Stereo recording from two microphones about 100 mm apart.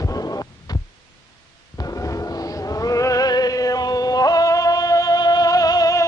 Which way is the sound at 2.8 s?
35° left (ahead or behind).